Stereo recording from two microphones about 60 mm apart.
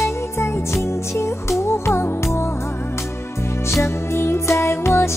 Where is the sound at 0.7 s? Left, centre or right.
Left.